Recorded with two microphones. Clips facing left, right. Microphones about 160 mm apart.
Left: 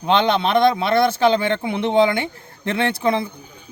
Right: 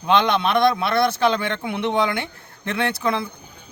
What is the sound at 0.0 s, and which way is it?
A man's voice, 30° left (ahead or behind).